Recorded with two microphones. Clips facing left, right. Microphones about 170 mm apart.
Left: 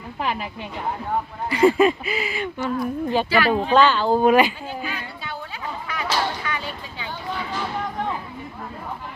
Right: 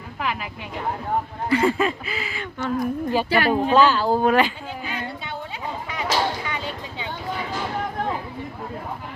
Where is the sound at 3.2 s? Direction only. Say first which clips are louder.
Even; 55° right (ahead or behind).